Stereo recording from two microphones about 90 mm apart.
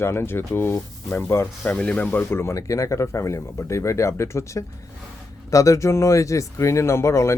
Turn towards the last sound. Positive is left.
turn(degrees=30)  # may be behind; listen again after turning